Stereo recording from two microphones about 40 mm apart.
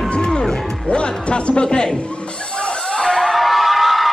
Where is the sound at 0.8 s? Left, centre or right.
Left.